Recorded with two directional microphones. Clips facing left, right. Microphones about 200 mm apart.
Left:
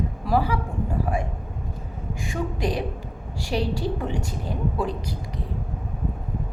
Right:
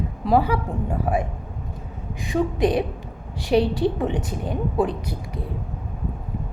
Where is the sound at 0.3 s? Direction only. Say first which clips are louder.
Right 4 dB; 25° right (ahead or behind).